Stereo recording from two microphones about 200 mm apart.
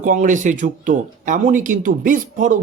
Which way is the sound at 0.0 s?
40° right (ahead or behind).